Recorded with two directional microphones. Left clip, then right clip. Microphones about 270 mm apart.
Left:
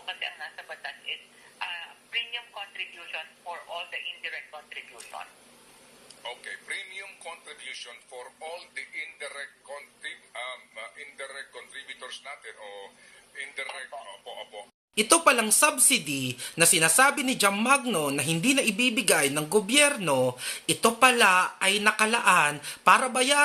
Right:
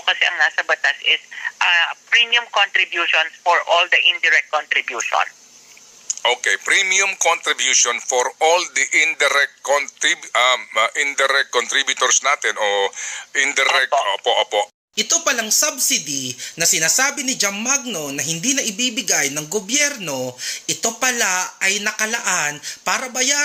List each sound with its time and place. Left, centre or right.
0.0 s a man's voice: right
14.9 s speech: centre